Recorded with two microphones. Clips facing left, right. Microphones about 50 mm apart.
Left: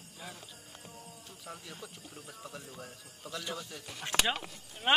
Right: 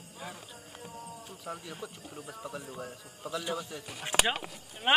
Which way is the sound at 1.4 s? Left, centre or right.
Centre.